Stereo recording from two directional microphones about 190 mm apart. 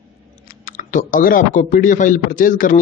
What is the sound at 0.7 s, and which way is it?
A man's voice, 45° left (ahead or behind).